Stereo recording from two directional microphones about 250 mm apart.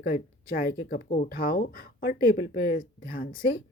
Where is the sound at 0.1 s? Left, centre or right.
Left.